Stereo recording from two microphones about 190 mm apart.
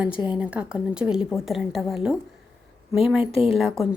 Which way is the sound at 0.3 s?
5° right (ahead or behind).